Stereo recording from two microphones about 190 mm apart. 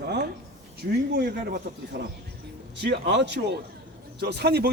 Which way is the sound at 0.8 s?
55° right (ahead or behind).